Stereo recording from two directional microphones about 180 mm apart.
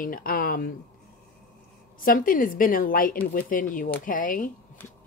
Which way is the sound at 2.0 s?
50° left (ahead or behind).